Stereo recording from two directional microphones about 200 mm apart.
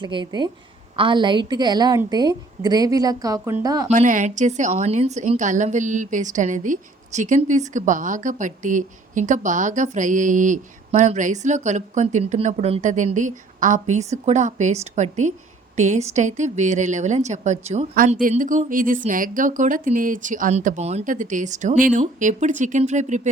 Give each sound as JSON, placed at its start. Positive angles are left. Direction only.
{"t": 0.0, "sound": "a woman's voice", "side_deg": -20}
{"t": 3.8, "sound": "a woman's voice", "side_deg": -40}